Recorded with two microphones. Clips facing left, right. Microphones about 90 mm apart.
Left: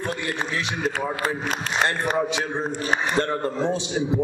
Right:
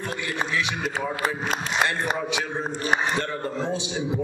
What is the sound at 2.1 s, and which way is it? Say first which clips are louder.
A man's voice: left 3 dB; 35° left (ahead or behind).